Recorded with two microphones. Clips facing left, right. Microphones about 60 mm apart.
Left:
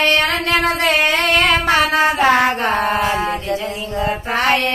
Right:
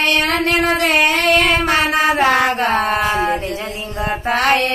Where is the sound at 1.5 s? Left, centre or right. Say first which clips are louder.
Left 1 dB; right.